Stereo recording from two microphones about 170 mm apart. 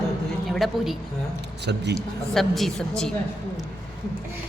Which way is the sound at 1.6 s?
85° right.